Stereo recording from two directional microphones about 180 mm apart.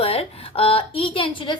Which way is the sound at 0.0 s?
35° left (ahead or behind).